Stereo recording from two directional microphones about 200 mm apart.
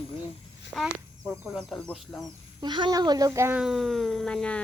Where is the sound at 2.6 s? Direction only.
20° right (ahead or behind).